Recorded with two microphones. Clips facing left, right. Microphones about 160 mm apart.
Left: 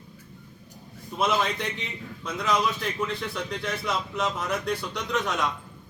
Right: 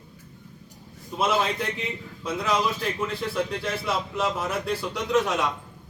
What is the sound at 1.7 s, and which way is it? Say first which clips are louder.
A man's voice: right 4 dB; 5° right (ahead or behind).